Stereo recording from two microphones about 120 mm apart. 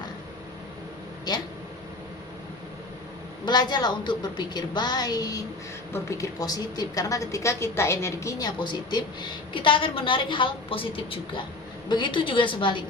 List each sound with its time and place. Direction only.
1.3 s a woman's voice: 35° left (ahead or behind)
3.4 s a woman's voice: 35° left (ahead or behind)